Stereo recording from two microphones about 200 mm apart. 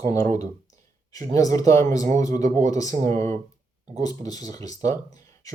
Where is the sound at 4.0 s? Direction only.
20° left (ahead or behind).